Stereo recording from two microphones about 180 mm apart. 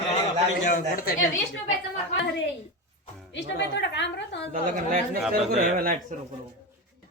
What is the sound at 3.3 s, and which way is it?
A woman's voice, 75° left (ahead or behind).